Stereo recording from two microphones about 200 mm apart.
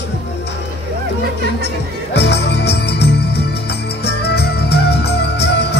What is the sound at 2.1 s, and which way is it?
Music, 55° left (ahead or behind).